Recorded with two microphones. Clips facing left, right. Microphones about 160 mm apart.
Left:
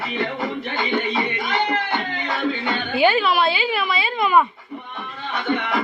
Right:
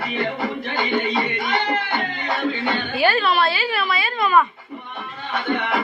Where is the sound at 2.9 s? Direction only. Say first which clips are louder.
Left 3 dB; 20° left (ahead or behind).